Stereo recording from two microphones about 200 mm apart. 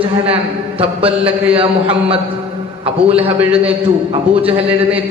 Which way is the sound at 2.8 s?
30° right (ahead or behind).